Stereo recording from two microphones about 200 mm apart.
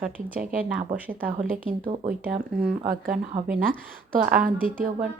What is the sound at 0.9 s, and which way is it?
Speech, 10° right (ahead or behind).